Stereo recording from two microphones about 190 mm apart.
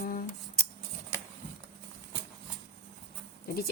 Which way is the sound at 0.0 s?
50° left (ahead or behind).